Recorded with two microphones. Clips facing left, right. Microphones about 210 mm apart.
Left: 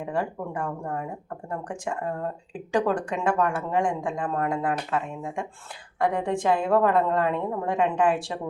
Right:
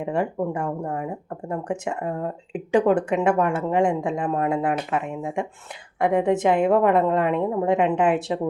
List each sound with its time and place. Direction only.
0.0 s speech: 25° right (ahead or behind)